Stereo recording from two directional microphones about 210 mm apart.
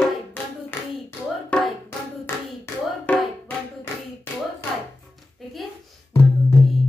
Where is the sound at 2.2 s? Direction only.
10° left (ahead or behind).